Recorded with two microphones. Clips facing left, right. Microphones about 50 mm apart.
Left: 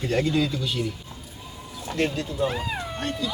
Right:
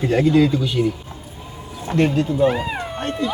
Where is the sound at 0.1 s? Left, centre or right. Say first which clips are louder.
Right 8 dB; centre.